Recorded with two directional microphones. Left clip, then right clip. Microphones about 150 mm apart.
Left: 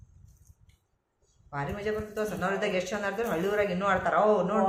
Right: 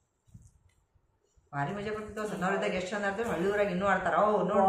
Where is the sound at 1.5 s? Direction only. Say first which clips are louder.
Left 2 dB; 35° left (ahead or behind).